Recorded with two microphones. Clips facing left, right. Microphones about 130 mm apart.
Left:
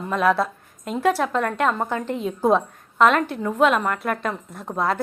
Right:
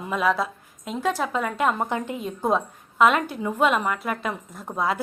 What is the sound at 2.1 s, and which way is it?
A woman's voice, centre (ahead or behind).